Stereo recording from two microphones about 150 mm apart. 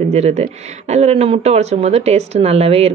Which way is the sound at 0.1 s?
45° right (ahead or behind).